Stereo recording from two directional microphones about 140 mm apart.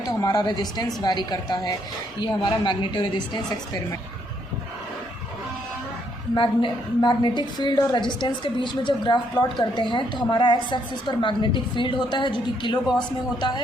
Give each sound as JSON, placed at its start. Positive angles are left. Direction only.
{"t": 0.2, "sound": "a woman's voice", "side_deg": 25}
{"t": 6.3, "sound": "a woman's voice", "side_deg": 35}